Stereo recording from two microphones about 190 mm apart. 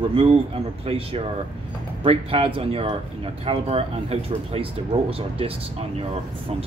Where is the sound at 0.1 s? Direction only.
30° right (ahead or behind).